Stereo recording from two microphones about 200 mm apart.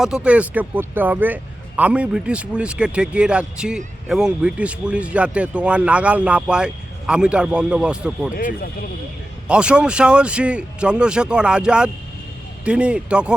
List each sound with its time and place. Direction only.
0.0 s speech: 5° right (ahead or behind)
8.4 s speech: 45° left (ahead or behind)
9.5 s speech: 5° right (ahead or behind)